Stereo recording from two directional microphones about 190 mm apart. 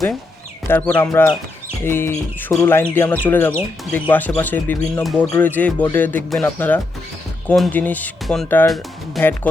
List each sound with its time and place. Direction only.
0.7 s speech: 10° left (ahead or behind)